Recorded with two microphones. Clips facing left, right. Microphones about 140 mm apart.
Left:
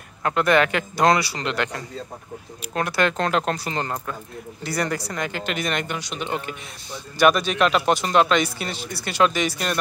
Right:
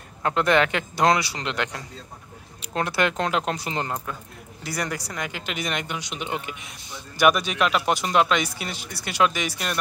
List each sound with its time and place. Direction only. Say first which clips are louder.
0.2 s speech: left 1 dB; 20° right (ahead or behind)